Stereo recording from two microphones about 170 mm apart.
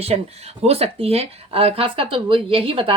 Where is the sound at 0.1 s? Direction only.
35° right (ahead or behind).